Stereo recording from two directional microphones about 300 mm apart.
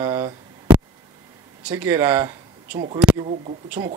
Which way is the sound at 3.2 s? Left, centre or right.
Right.